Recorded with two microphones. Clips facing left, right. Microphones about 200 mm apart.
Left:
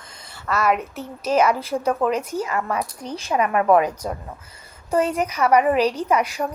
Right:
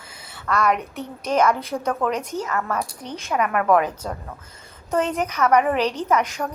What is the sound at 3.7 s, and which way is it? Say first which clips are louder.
A woman's voice: left 2 dB; 10° left (ahead or behind).